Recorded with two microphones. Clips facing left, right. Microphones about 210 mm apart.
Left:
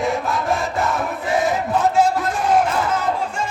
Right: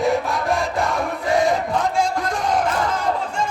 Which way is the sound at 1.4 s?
5° left (ahead or behind).